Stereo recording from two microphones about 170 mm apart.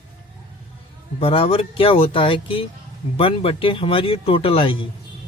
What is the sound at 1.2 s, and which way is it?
A man's voice, 35° left (ahead or behind).